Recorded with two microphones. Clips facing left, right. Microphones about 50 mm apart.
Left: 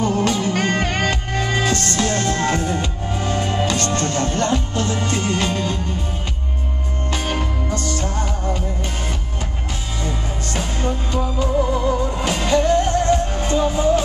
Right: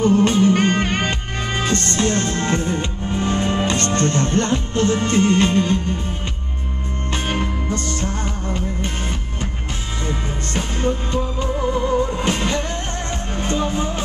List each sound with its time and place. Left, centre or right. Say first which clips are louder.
0.0 s music: right 4 dB; right
7.1 s music: right 1 dB; right
10.0 s music: right 1 dB; right